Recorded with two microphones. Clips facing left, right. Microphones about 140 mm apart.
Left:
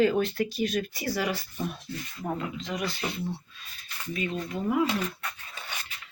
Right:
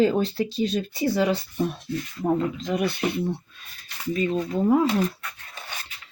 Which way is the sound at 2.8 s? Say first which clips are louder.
Right 7 dB; 55° right (ahead or behind).